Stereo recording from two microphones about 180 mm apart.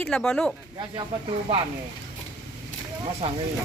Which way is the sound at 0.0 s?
5° left (ahead or behind).